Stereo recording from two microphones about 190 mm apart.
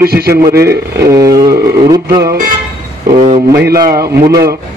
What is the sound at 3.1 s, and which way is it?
Speech, 30° right (ahead or behind).